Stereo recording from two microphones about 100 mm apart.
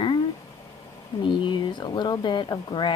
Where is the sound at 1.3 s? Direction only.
55° left (ahead or behind).